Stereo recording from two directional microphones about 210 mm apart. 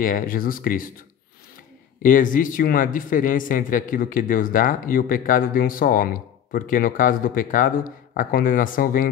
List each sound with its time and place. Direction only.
0.0 s speech: 40° left (ahead or behind)
2.0 s a man's voice: 40° left (ahead or behind)